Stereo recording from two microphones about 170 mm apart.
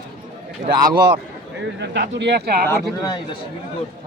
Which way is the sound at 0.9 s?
70° right (ahead or behind).